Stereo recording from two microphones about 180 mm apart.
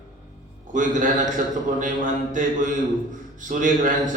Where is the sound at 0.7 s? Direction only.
45° right (ahead or behind).